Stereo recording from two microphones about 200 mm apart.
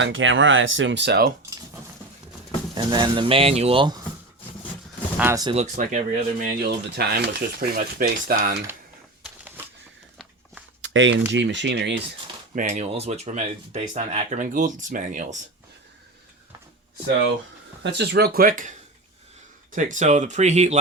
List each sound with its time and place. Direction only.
0.0 s speech: 70° right (ahead or behind); by 1.3 s 55° right (ahead or behind)
2.7 s speech: 20° right (ahead or behind)
5.1 s speech: 15° right (ahead or behind)
5.5 s speech: 40° right (ahead or behind)
6.4 s speech: 55° right (ahead or behind)
9.2 s a sound: 5° right (ahead or behind)
10.8 s a sound: 70° right (ahead or behind)
11.3 s speech: 65° right (ahead or behind)
12.5 s speech: 35° right (ahead or behind)
17.8 s speech: 55° right (ahead or behind)
19.7 s speech: 40° right (ahead or behind)